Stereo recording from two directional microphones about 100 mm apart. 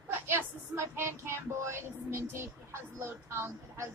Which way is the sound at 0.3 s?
25° right (ahead or behind).